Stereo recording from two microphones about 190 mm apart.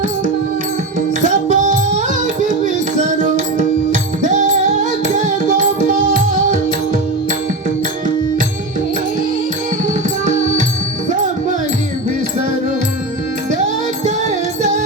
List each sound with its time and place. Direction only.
0.9 s music: 40° right (ahead or behind)
9.8 s music: 40° right (ahead or behind)
14.3 s music: 40° right (ahead or behind)